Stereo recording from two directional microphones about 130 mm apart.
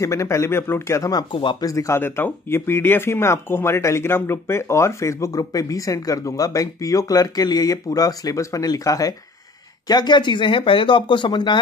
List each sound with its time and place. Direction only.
0.0 s speech: 25° left (ahead or behind)
1.3 s speech: 40° left (ahead or behind)